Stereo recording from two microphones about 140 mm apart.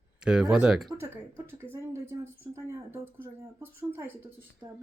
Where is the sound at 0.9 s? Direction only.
15° right (ahead or behind).